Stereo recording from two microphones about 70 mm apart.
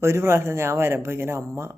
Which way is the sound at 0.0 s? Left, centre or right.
Right.